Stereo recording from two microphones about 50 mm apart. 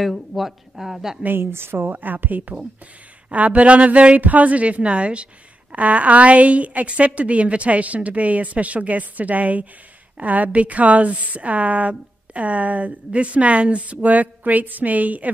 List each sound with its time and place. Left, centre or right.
0.0 s speech: centre
1.2 s a woman's voice: right